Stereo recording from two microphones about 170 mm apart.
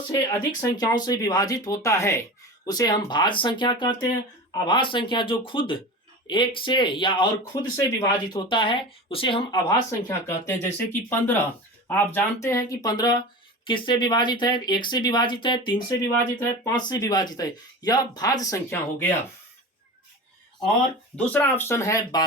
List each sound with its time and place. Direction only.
0.1 s speech: 20° left (ahead or behind)
7.9 s speech: 20° left (ahead or behind)
8.4 s speech: 30° left (ahead or behind)
10.1 s speech: 15° left (ahead or behind)
21.2 s speech: 10° left (ahead or behind)